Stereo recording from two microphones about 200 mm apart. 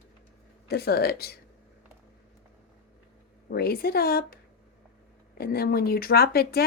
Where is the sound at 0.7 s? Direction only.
50° left (ahead or behind).